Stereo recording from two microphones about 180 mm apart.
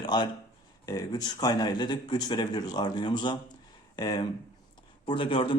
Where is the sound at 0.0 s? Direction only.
25° left (ahead or behind).